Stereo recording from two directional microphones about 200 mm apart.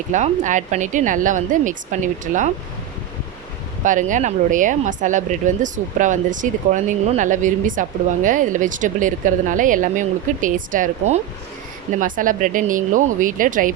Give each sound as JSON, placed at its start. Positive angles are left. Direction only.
{"t": 0.1, "sound": "speech", "side_deg": -40}
{"t": 3.8, "sound": "speech", "side_deg": -40}